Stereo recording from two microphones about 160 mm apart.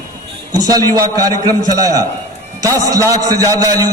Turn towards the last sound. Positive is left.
turn(degrees=-20)  # may be behind; listen again after turning